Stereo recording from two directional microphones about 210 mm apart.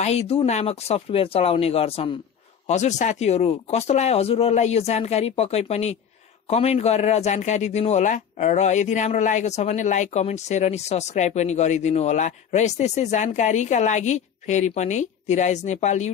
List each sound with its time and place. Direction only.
0.0 s a man's voice: 30° left (ahead or behind)